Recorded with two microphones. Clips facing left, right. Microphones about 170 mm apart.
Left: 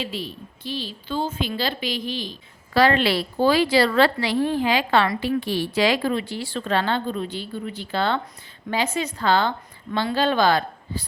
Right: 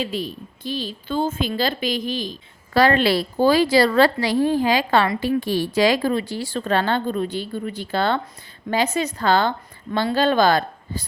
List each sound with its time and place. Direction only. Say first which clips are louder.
0.0 s a woman's voice: right 4 dB; 45° right (ahead or behind)